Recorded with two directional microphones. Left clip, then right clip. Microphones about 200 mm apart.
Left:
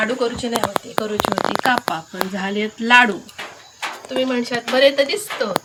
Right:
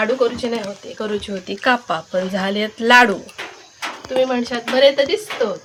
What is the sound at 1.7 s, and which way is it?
Speech, 65° right (ahead or behind).